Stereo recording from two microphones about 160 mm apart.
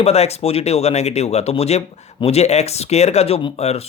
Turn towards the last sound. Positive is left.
turn(degrees=40)  # may be behind; listen again after turning